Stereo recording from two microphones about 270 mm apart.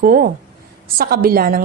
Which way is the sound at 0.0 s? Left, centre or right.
Right.